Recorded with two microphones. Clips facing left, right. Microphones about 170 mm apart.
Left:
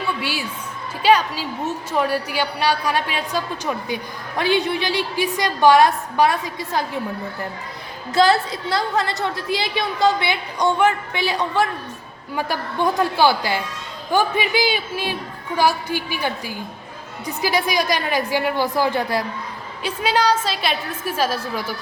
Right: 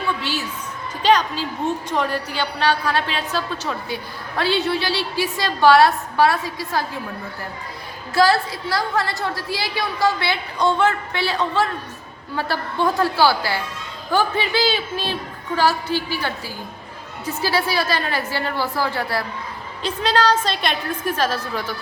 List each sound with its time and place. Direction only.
0.2 s a woman's voice: 10° left (ahead or behind)
8.1 s a woman's voice: 20° left (ahead or behind)